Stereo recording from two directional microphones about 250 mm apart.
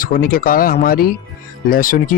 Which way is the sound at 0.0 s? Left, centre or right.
Left.